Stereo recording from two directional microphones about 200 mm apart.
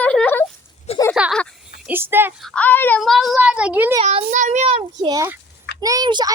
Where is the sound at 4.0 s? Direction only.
35° right (ahead or behind).